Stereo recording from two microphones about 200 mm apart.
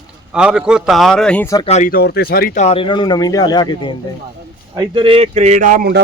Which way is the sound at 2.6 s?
25° left (ahead or behind).